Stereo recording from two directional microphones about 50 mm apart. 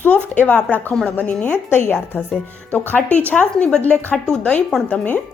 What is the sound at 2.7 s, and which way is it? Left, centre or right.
A woman's voice, left.